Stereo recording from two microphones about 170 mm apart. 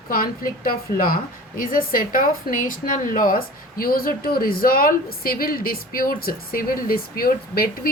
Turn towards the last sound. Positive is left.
turn(degrees=60)  # may be behind; listen again after turning